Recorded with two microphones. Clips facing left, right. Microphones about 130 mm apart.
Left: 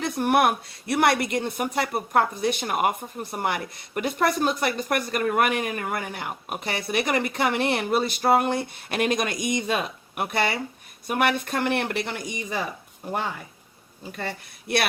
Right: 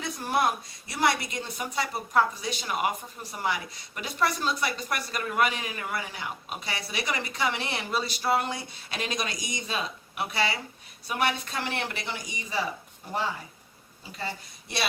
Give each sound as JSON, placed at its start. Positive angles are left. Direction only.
{"t": 0.0, "sound": "speech", "side_deg": 65}
{"t": 14.0, "sound": "speech", "side_deg": 60}